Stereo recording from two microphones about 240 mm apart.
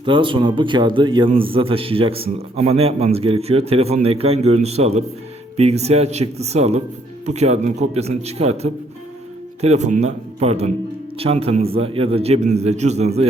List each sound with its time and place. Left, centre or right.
0.0 s a man's voice: right